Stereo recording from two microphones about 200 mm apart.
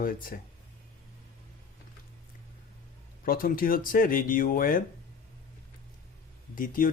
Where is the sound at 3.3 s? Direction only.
45° left (ahead or behind).